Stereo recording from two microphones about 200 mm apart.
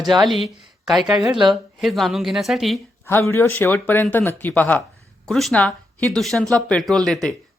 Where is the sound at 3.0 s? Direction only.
10° left (ahead or behind).